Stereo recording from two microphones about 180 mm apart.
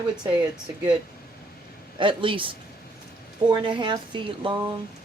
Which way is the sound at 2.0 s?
30° right (ahead or behind).